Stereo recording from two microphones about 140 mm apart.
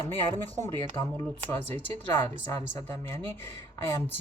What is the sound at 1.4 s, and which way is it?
Speech, 15° left (ahead or behind).